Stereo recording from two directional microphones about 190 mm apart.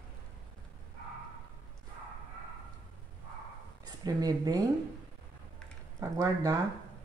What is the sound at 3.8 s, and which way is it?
Speech, 20° right (ahead or behind).